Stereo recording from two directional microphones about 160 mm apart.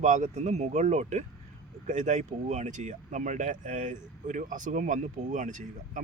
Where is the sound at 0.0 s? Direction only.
45° right (ahead or behind).